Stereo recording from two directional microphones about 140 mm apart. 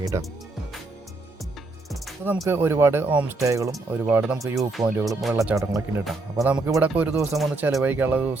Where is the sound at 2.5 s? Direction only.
15° right (ahead or behind).